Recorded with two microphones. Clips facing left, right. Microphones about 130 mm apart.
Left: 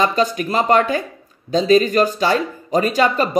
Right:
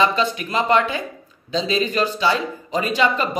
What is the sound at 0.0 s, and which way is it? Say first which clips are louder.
Speech: left 2 dB; 40° left (ahead or behind).